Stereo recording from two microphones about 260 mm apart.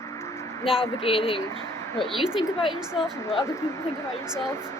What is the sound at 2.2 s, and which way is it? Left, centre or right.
Speech, centre.